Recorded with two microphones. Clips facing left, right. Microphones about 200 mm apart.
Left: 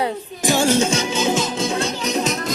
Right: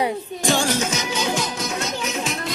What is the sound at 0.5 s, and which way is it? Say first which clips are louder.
Music: left 6 dB; 25° left (ahead or behind).